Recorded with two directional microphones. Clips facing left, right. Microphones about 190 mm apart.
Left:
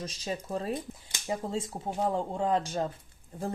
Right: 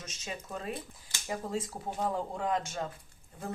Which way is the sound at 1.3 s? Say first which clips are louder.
Left 3 dB; 25° left (ahead or behind).